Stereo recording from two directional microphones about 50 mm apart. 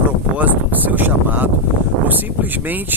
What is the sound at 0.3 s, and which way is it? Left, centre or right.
Speech, right.